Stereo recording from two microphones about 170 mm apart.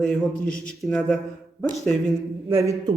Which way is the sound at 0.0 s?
5° left (ahead or behind).